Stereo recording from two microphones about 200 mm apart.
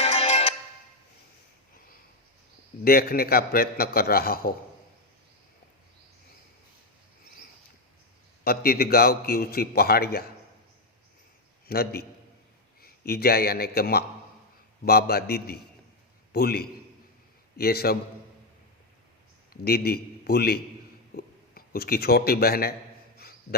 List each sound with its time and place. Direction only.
0.0 s music: 30° left (ahead or behind)
2.8 s a man's voice: 50° left (ahead or behind)
8.4 s a man's voice: 50° left (ahead or behind)
11.7 s a man's voice: 50° left (ahead or behind)
19.6 s a man's voice: 50° left (ahead or behind)
23.1 s a sound: 50° left (ahead or behind)